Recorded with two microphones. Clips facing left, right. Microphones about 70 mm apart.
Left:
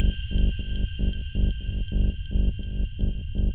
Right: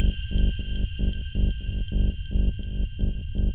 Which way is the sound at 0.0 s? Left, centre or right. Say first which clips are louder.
Even; centre.